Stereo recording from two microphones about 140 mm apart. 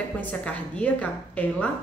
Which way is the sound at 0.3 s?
10° left (ahead or behind).